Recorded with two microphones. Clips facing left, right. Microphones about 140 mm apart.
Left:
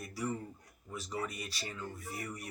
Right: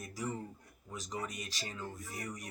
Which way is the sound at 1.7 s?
20° right (ahead or behind).